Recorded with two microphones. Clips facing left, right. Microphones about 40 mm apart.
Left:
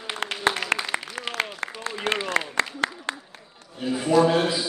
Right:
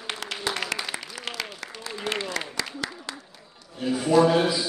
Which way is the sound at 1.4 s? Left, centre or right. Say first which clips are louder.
Left 6 dB; left.